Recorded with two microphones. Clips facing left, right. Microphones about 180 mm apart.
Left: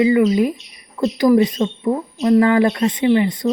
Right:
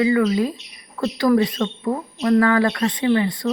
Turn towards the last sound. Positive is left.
turn(degrees=20)  # may be behind; listen again after turning